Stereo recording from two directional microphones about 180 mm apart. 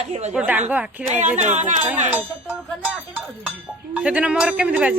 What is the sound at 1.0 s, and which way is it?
Speech, 40° right (ahead or behind).